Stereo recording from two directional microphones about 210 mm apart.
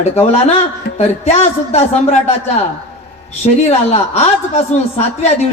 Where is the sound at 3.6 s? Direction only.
30° left (ahead or behind).